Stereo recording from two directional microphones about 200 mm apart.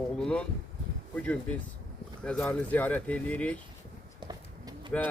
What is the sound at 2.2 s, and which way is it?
Speech, 5° left (ahead or behind).